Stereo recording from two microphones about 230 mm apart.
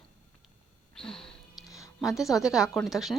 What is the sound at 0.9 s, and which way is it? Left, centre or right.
A woman's voice, centre.